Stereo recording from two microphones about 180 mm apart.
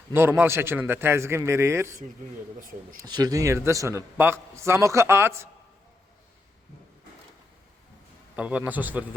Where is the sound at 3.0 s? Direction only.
20° right (ahead or behind).